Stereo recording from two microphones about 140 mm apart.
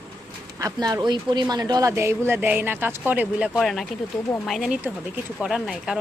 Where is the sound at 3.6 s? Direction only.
Centre (ahead or behind).